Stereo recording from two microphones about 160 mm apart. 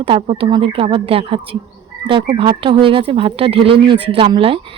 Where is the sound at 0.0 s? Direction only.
35° right (ahead or behind).